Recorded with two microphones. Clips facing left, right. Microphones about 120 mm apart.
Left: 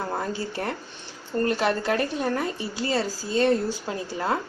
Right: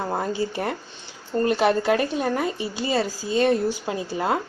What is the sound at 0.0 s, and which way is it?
Speech, 20° right (ahead or behind).